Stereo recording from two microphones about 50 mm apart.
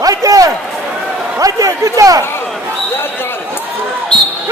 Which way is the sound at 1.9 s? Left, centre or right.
Right.